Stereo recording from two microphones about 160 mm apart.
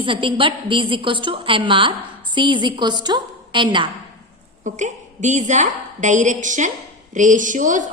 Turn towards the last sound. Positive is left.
turn(degrees=-55)  # may be behind; listen again after turning